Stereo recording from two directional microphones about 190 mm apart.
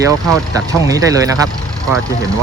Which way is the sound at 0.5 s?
20° right (ahead or behind).